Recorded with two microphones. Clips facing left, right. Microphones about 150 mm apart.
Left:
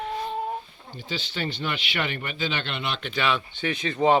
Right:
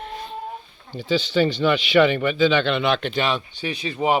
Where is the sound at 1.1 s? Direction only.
90° right.